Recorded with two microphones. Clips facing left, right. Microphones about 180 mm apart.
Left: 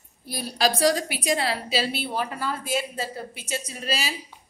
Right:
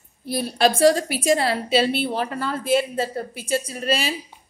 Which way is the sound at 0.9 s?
30° right (ahead or behind).